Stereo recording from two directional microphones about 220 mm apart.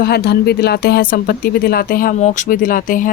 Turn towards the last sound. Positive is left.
turn(degrees=35)  # may be behind; listen again after turning